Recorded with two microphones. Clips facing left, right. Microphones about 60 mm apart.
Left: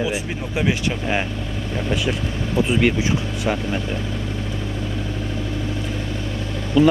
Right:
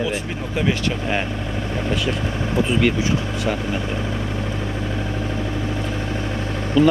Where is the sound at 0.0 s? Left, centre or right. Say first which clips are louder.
Even; centre.